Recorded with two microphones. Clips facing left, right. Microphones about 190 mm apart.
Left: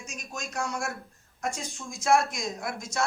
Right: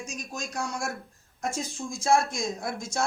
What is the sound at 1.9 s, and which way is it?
Speech, 30° right (ahead or behind).